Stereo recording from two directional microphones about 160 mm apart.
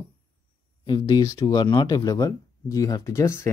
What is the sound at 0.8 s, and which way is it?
Speech, 25° left (ahead or behind).